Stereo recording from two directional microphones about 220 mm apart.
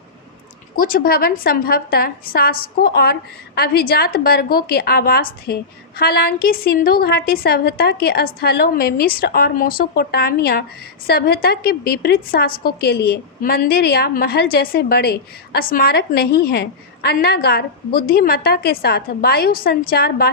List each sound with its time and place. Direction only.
0.8 s a woman's voice: 40° left (ahead or behind)